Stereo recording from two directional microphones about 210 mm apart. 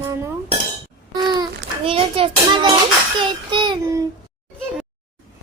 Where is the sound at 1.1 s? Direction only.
20° right (ahead or behind).